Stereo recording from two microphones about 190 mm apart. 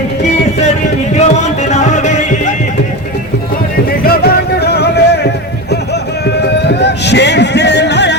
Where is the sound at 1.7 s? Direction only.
40° left (ahead or behind).